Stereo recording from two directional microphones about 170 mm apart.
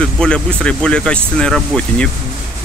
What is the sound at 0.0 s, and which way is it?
Speech, 5° left (ahead or behind).